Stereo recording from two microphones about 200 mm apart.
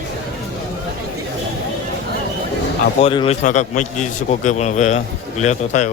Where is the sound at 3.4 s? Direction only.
40° left (ahead or behind).